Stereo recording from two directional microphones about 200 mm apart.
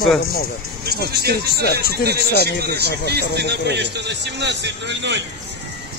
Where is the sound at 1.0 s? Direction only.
50° right (ahead or behind).